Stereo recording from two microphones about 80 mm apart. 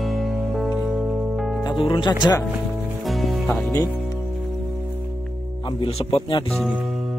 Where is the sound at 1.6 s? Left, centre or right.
Left.